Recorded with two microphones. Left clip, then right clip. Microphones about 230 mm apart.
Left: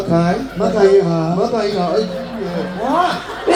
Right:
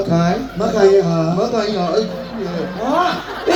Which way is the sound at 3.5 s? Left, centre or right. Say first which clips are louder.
Left 1 dB; right.